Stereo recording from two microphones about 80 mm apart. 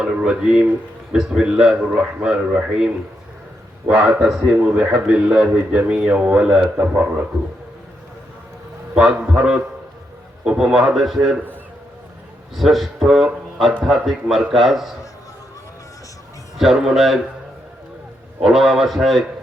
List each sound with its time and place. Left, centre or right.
0.0 s a man's voice: centre
9.0 s a man's voice: centre
12.5 s a man's voice: centre
16.6 s a man's voice: centre
18.4 s a man's voice: centre